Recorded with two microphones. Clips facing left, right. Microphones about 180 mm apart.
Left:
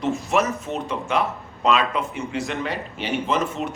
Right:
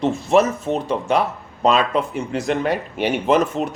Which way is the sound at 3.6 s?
40° right (ahead or behind).